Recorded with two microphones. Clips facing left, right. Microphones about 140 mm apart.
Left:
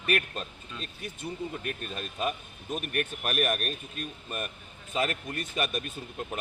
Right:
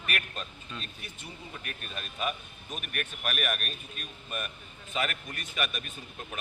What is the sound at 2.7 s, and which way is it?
A man's voice, 35° left (ahead or behind).